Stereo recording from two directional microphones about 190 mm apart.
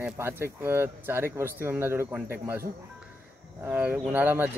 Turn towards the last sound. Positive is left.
turn(degrees=-10)  # may be behind; listen again after turning